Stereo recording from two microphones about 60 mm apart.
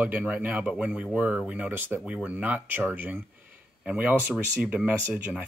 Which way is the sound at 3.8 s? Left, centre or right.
Centre.